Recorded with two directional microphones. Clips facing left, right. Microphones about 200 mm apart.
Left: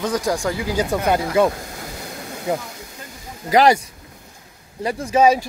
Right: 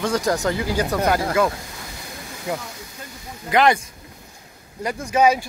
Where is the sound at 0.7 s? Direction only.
20° left (ahead or behind).